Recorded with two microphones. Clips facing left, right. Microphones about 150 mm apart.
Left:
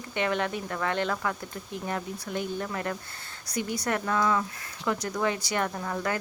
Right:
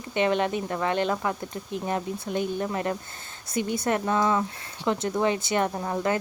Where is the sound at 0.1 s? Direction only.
20° right (ahead or behind).